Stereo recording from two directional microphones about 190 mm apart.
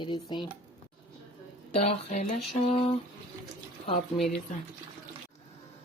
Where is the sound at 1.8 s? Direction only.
35° left (ahead or behind).